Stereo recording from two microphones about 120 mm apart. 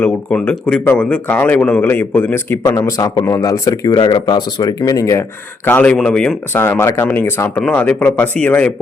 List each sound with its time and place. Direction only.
0.0 s speech: 10° left (ahead or behind); by 5.2 s 25° left (ahead or behind)
5.6 s speech: 15° left (ahead or behind)
6.5 s speech: 20° left (ahead or behind)